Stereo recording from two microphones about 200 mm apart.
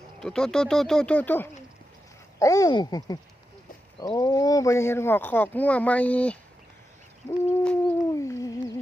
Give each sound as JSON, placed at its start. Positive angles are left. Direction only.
{"t": 0.2, "sound": "speech", "side_deg": 5}
{"t": 7.5, "sound": "bird", "side_deg": 5}
{"t": 8.2, "sound": "humming", "side_deg": 15}